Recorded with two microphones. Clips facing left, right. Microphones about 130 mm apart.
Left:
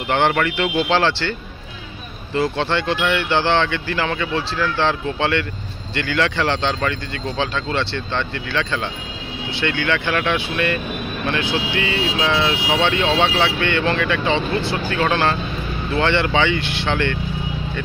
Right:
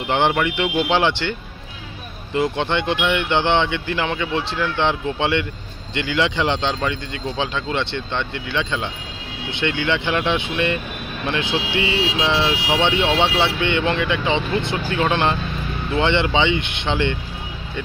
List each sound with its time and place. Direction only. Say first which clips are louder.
0.1 s speech: left 1 dB; 15° right (ahead or behind)
2.3 s speech: even; 15° right (ahead or behind)